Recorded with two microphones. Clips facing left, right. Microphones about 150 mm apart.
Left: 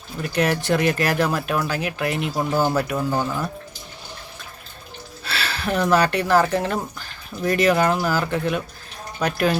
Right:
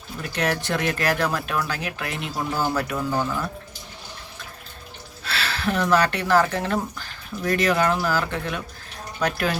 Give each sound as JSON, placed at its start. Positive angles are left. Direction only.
{"t": 0.2, "sound": "speech", "side_deg": 5}
{"t": 2.4, "sound": "speech", "side_deg": 25}
{"t": 5.2, "sound": "speech", "side_deg": 0}